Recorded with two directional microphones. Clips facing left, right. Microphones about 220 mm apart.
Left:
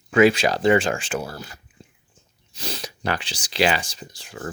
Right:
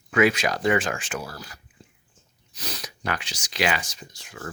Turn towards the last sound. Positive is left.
turn(degrees=30)  # may be behind; listen again after turning